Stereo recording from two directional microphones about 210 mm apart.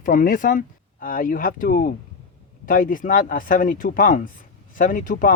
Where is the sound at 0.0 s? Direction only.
40° left (ahead or behind).